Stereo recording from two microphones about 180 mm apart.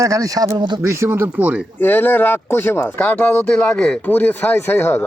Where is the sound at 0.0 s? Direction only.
20° right (ahead or behind).